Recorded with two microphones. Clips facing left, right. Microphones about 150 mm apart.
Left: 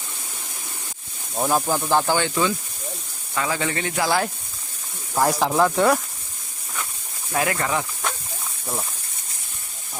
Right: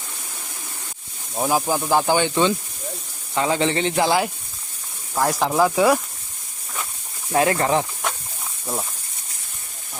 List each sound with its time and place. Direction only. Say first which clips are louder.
1.4 s speech: right 1 dB; 5° right (ahead or behind); by 4.2 s 25° right (ahead or behind)
5.1 s speech: even; centre (ahead or behind)
7.3 s speech: right 5 dB; 30° right (ahead or behind)